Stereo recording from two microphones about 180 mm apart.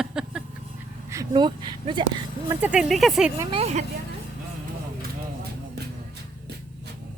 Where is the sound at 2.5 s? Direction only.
10° right (ahead or behind).